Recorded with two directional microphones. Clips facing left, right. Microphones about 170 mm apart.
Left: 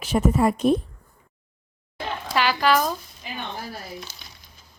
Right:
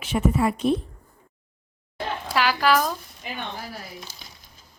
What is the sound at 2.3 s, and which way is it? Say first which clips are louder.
Speech: even; 5° right (ahead or behind).